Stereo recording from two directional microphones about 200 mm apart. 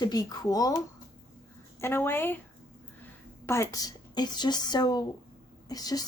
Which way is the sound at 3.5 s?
15° left (ahead or behind).